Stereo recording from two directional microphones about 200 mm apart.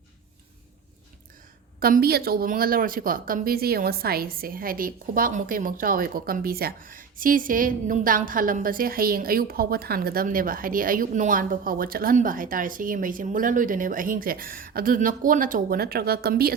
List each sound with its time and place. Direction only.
1.8 s speech: 50° right (ahead or behind)